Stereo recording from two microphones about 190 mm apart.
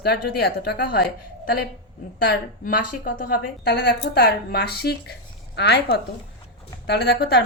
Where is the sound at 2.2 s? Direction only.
55° left (ahead or behind).